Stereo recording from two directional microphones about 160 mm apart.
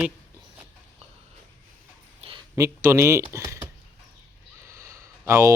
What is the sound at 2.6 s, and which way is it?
Speech, 15° right (ahead or behind).